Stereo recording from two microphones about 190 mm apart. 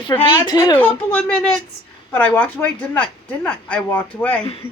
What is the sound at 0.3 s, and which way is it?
Speech, 20° left (ahead or behind).